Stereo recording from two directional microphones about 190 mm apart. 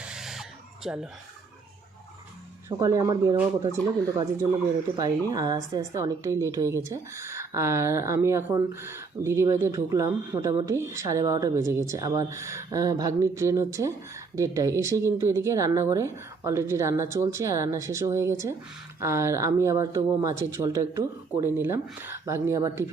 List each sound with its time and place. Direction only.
0.1 s a sound: centre (ahead or behind)
0.9 s speech: 5° right (ahead or behind)
2.6 s speech: 15° right (ahead or behind)
3.3 s a woman's voice: 10° right (ahead or behind)
4.9 s a woman's voice: 20° right (ahead or behind)